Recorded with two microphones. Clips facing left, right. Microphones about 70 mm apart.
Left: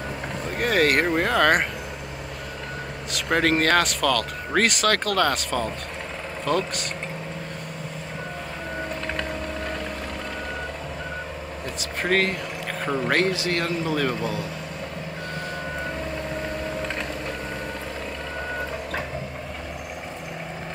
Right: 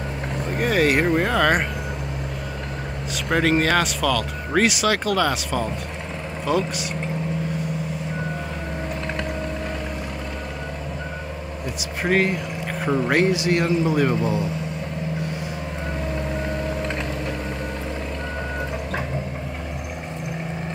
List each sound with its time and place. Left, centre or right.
0.6 s speech: centre
3.1 s a man's voice: centre
12.0 s a man's voice: centre
13.2 s a man's voice: centre